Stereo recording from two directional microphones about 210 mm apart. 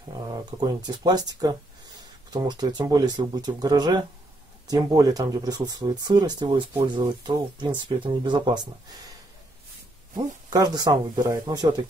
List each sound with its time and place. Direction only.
0.6 s speech: 20° right (ahead or behind)
10.1 s speech: 20° right (ahead or behind)